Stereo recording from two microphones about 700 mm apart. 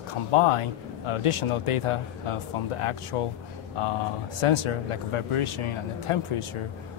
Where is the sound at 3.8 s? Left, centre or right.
Left.